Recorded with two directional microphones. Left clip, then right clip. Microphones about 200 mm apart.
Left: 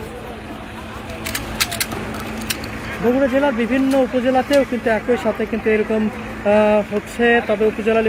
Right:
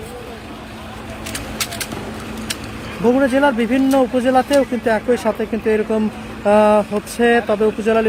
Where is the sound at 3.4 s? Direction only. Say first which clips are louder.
Right 2 dB; 20° right (ahead or behind).